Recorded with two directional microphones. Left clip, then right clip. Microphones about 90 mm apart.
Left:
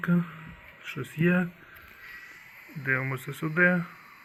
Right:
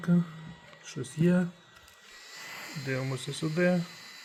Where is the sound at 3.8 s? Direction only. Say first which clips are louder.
Left 1 dB; 90° right.